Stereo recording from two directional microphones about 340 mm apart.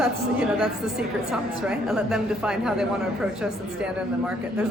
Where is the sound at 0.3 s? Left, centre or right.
Centre.